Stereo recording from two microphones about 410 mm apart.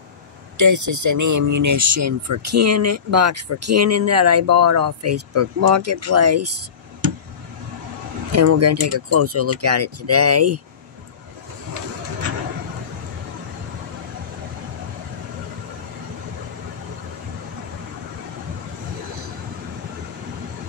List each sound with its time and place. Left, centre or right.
0.6 s speech: right
8.3 s speech: right